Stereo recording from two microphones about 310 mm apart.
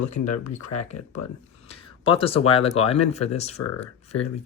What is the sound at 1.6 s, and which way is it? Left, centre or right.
Speech, centre.